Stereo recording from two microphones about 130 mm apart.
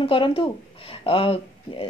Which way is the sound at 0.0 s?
45° left (ahead or behind).